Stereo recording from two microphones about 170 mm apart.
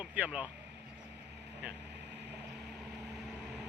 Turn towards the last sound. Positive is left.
turn(degrees=-5)  # may be behind; listen again after turning